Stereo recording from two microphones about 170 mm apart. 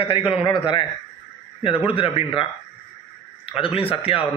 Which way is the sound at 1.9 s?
30° left (ahead or behind).